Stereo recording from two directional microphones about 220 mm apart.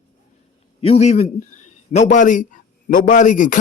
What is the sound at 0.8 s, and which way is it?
A man's voice, 30° left (ahead or behind).